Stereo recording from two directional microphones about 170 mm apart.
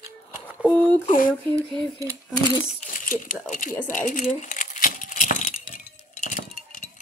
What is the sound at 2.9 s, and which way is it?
Speech, 50° left (ahead or behind).